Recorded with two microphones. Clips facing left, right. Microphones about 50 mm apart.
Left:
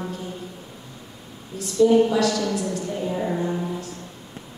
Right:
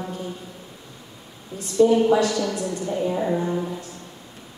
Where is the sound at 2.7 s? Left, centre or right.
Right.